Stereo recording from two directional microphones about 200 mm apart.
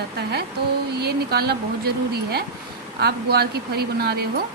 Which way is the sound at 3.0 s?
50° right (ahead or behind).